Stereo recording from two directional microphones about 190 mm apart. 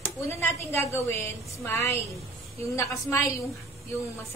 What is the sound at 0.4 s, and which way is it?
A woman's voice, 15° left (ahead or behind).